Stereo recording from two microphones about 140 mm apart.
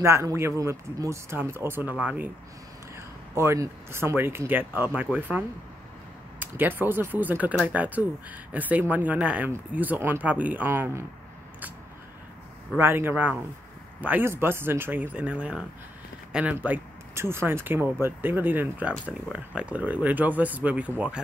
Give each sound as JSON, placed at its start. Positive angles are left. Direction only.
{"t": 0.0, "sound": "speech", "side_deg": -20}
{"t": 3.3, "sound": "speech", "side_deg": -20}
{"t": 6.4, "sound": "speech", "side_deg": -15}
{"t": 12.7, "sound": "speech", "side_deg": -15}